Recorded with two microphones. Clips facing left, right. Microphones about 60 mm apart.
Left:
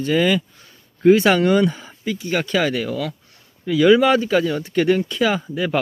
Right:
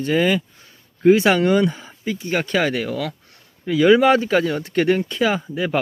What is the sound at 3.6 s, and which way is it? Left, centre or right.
Speech, right.